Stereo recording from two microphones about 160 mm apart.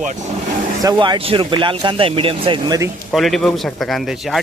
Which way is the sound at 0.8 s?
25° right (ahead or behind).